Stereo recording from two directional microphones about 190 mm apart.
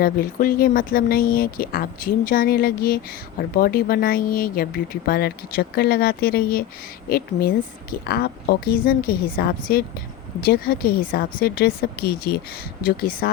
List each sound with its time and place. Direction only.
0.0 s speech: 50° left (ahead or behind)